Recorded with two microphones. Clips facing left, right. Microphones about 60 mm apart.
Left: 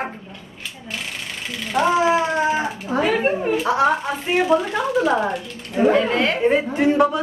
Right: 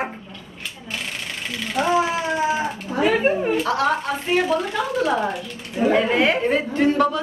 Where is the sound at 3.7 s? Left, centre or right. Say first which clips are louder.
Left 5 dB; centre.